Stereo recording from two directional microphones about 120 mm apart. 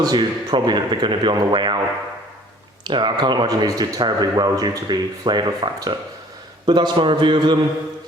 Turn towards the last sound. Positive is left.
turn(degrees=-40)  # may be behind; listen again after turning